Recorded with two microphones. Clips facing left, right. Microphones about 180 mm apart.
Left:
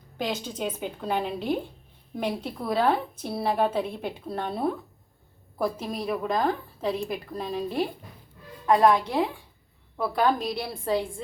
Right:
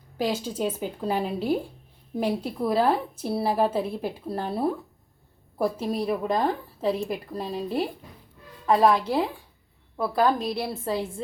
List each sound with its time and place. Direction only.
0.2 s a woman's voice: 5° right (ahead or behind)
5.7 s a woman's voice: 5° right (ahead or behind)
6.2 s a woman's voice: 30° right (ahead or behind)
7.3 s a woman's voice: 5° right (ahead or behind)